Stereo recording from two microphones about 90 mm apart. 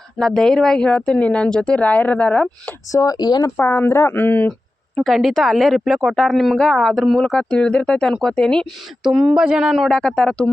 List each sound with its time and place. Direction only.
0.2 s speech: 5° left (ahead or behind)
2.9 s speech: 40° left (ahead or behind)
3.6 s speech: 25° left (ahead or behind)
4.9 s a woman's voice: centre (ahead or behind)
9.0 s a woman's voice: 5° right (ahead or behind)
10.0 s speech: 10° left (ahead or behind)